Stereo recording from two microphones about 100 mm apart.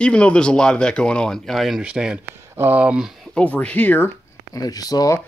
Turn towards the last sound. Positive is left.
turn(degrees=40)  # may be behind; listen again after turning